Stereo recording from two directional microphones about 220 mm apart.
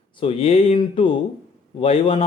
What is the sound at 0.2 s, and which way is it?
Speech, 25° left (ahead or behind).